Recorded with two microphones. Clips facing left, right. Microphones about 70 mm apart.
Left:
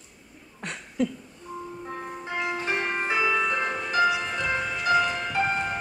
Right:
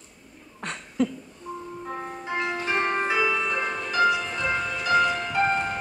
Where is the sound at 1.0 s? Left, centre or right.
Right.